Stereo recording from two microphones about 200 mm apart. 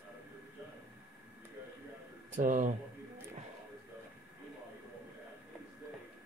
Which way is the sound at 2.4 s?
40° right (ahead or behind).